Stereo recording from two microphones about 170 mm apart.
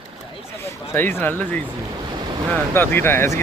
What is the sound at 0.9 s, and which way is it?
Speech, 10° left (ahead or behind).